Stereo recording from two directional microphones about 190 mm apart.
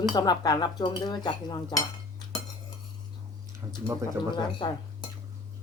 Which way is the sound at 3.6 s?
20° right (ahead or behind).